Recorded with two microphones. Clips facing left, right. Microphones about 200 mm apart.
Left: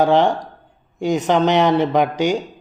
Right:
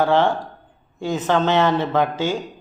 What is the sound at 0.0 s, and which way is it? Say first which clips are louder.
A man's voice: left 3 dB; 15° left (ahead or behind).